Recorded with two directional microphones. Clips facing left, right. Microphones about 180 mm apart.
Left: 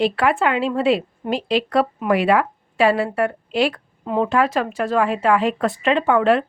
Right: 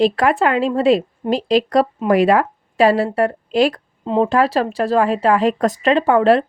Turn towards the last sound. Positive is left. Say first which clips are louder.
# right 3 dB
turn(degrees=-35)  # may be behind; listen again after turning